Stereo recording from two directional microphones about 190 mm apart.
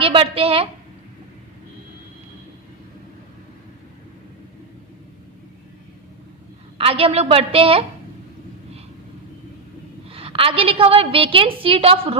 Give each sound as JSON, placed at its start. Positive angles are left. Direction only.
{"t": 0.0, "sound": "a woman's voice", "side_deg": -30}
{"t": 6.7, "sound": "a woman's voice", "side_deg": -30}
{"t": 10.1, "sound": "a woman's voice", "side_deg": -30}